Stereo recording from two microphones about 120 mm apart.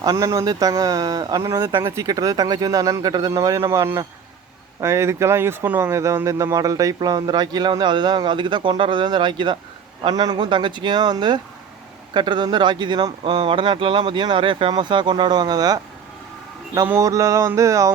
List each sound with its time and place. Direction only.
0.0 s speech: 30° right (ahead or behind)
16.8 s mantra: 25° right (ahead or behind)